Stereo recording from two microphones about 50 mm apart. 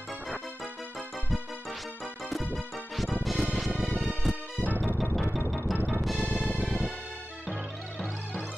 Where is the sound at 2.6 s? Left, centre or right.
Centre.